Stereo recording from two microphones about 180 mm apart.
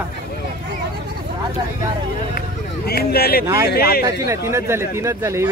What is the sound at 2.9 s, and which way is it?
Speech, 60° left (ahead or behind).